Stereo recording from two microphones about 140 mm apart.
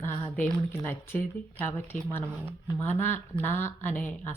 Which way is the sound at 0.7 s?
15° left (ahead or behind).